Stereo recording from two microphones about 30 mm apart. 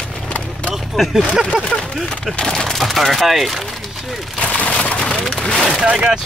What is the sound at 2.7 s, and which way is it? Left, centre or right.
Speech, centre.